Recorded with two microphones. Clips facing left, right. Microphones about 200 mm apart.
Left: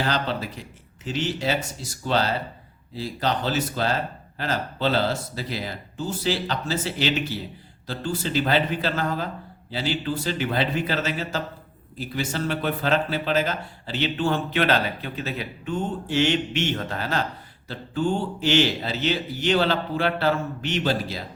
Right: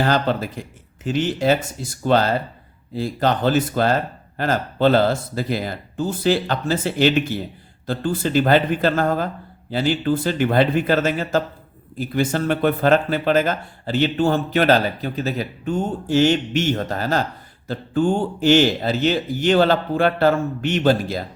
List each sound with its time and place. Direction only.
0.0 s speech: 50° right (ahead or behind)